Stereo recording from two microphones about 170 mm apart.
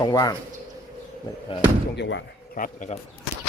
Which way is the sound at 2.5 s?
55° left (ahead or behind).